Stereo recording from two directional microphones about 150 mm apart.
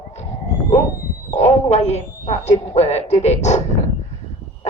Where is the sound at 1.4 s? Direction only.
45° left (ahead or behind).